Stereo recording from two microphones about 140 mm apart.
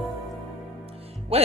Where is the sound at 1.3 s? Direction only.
45° right (ahead or behind).